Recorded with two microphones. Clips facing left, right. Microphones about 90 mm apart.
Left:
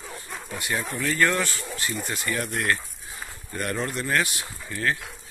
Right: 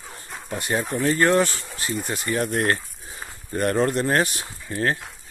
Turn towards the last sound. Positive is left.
turn(degrees=-35)  # may be behind; listen again after turning